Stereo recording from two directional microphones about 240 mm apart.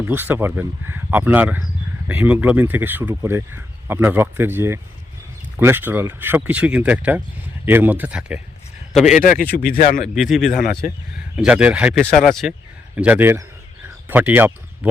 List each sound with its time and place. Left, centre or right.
0.0 s a man's voice: centre
9.1 s speech: left
10.2 s a man's voice: centre